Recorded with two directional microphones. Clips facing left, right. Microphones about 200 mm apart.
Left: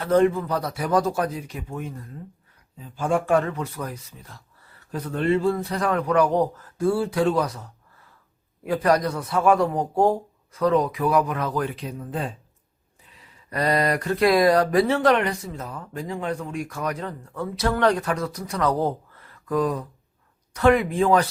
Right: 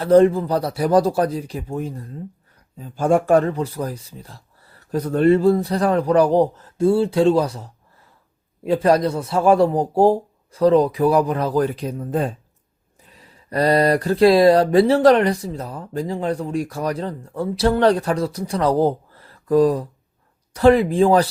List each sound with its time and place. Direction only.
0.0 s speech: 35° right (ahead or behind)